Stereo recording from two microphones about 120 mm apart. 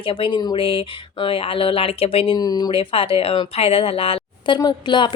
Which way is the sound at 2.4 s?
35° left (ahead or behind).